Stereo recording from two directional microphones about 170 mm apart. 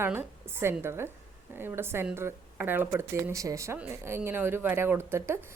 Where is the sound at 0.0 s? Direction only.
15° right (ahead or behind).